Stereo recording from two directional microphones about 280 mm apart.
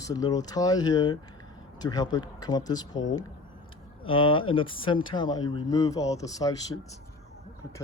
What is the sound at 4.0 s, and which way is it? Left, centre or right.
Speech, centre.